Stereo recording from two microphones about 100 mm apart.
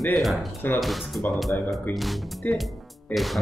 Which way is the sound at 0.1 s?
Centre (ahead or behind).